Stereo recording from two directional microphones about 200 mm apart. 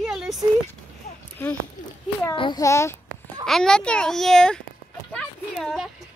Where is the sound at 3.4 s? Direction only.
Centre (ahead or behind).